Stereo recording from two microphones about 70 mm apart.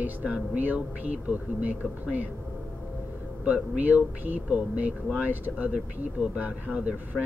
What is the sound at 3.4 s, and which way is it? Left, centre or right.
Speech, centre.